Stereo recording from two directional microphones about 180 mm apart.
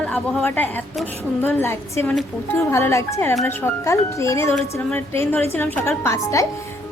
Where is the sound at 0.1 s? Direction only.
10° left (ahead or behind).